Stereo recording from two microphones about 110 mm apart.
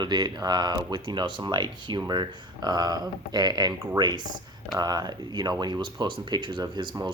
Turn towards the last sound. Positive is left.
turn(degrees=-45)  # may be behind; listen again after turning